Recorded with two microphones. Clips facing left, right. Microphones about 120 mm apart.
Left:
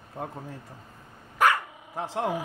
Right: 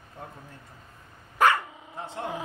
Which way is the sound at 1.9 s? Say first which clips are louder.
Left 6 dB; 90° left.